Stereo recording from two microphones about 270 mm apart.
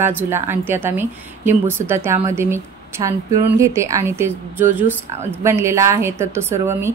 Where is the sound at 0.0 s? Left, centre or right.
Centre.